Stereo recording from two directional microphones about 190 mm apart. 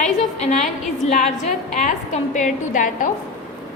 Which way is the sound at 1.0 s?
35° left (ahead or behind).